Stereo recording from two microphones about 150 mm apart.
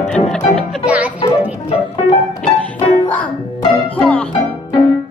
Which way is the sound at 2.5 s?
35° left (ahead or behind).